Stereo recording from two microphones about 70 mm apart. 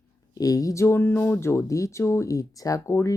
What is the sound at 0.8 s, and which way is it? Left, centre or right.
Speech, left.